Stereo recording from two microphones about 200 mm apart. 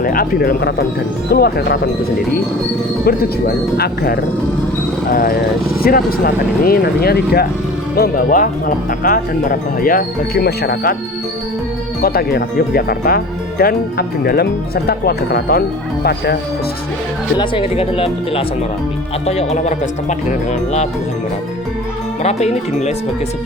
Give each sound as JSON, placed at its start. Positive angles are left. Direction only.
{"t": 0.0, "sound": "speech", "side_deg": 45}
{"t": 3.1, "sound": "speech", "side_deg": 50}
{"t": 12.0, "sound": "speech", "side_deg": 50}
{"t": 17.3, "sound": "speech", "side_deg": 25}
{"t": 22.2, "sound": "speech", "side_deg": 35}